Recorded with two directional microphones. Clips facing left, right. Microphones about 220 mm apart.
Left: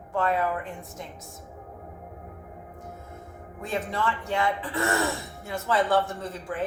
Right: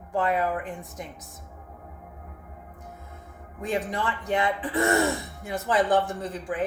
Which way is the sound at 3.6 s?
15° right (ahead or behind).